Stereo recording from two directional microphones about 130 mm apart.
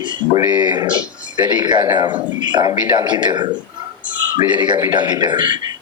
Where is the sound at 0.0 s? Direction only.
35° right (ahead or behind).